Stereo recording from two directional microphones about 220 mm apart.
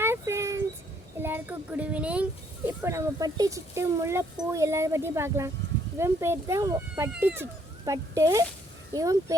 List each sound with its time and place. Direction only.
0.0 s dog: 10° right (ahead or behind)
1.2 s a sound: 10° right (ahead or behind)
2.6 s speech: 10° right (ahead or behind)